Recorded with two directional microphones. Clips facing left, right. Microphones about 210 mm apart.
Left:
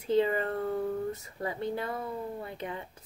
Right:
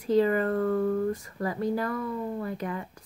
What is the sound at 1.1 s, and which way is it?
Speech, 25° left (ahead or behind).